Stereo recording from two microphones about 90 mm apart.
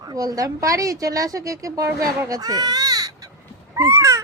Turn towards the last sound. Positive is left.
turn(degrees=-35)  # may be behind; listen again after turning